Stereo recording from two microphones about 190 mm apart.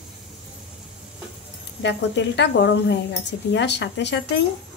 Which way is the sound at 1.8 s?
65° left (ahead or behind).